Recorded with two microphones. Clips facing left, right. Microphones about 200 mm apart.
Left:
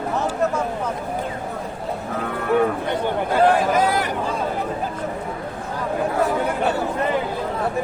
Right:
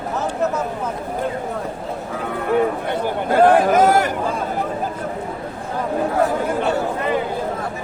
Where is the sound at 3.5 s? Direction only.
50° right (ahead or behind).